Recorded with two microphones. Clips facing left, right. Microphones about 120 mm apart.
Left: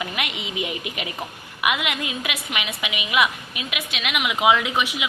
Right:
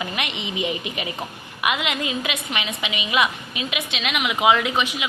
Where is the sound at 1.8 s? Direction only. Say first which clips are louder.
Right 2 dB; 10° left (ahead or behind).